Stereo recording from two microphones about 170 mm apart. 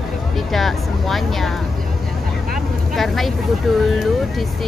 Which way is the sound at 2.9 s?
Centre (ahead or behind).